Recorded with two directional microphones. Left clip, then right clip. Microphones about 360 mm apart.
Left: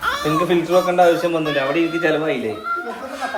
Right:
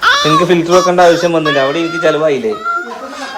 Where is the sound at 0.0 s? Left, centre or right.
Right.